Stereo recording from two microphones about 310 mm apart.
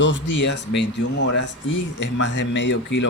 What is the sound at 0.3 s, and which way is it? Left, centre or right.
Speech, left.